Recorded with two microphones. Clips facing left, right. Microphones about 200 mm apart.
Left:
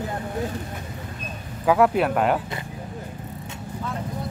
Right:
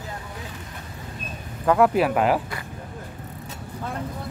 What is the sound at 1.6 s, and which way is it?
Speech, centre (ahead or behind).